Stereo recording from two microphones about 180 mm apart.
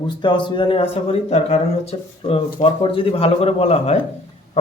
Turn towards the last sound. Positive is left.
turn(degrees=35)  # may be behind; listen again after turning